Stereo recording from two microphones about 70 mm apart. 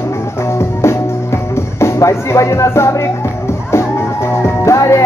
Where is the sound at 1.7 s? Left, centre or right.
Left.